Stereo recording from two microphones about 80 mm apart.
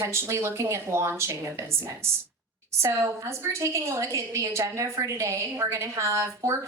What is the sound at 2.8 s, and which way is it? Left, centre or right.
A woman's voice, right.